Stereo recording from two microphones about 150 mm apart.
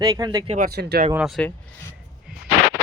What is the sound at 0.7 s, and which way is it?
Speech, 90° right.